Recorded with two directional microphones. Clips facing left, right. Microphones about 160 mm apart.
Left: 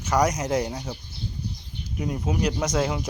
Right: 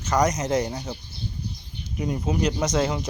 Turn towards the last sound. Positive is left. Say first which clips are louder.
# right 1 dB
turn(degrees=5)  # may be behind; listen again after turning